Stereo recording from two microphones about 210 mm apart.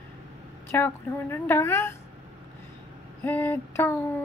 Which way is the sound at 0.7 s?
10° left (ahead or behind).